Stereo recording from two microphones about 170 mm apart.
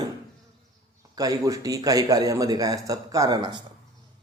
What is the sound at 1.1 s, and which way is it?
Speech, 20° right (ahead or behind).